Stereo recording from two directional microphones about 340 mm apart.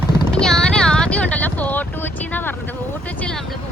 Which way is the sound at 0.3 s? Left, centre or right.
Centre.